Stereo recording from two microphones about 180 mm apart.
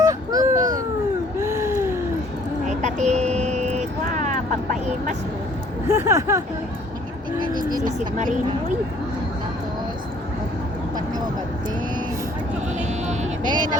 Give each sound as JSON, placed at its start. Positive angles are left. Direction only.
{"t": 0.0, "sound": "a sound", "side_deg": -20}
{"t": 0.5, "sound": "a sound", "side_deg": -45}
{"t": 1.4, "sound": "a sound", "side_deg": -15}
{"t": 2.6, "sound": "vehicle", "side_deg": -40}
{"t": 4.7, "sound": "speech", "side_deg": -40}
{"t": 5.9, "sound": "speech", "side_deg": -15}
{"t": 7.4, "sound": "speech", "side_deg": -25}
{"t": 7.9, "sound": "speech", "side_deg": -40}
{"t": 13.4, "sound": "speech", "side_deg": -25}